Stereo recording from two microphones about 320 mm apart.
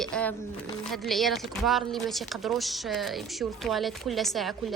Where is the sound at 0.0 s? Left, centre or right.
Centre.